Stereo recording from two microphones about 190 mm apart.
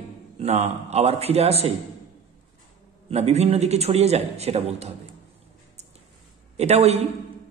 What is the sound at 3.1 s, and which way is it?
A man's voice, 35° right (ahead or behind).